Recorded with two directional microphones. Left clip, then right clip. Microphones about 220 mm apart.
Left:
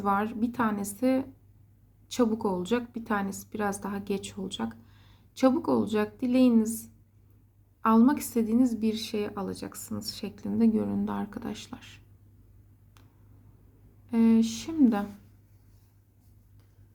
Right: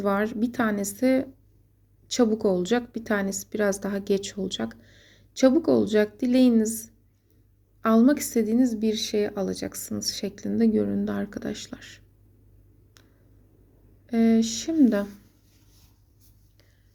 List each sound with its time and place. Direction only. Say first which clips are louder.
0.0 s a woman's voice: right 2 dB; 15° right (ahead or behind)
14.1 s a woman's voice: right 2 dB; 10° right (ahead or behind)